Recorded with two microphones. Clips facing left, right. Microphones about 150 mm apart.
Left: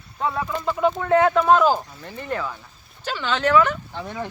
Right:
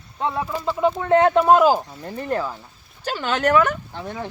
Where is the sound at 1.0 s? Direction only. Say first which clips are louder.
Right 2 dB; 25° right (ahead or behind).